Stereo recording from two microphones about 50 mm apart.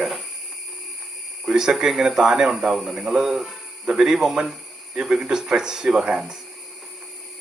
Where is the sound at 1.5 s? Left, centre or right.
Centre.